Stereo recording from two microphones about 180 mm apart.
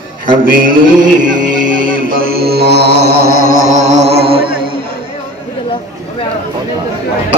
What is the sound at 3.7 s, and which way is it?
Music, 40° right (ahead or behind).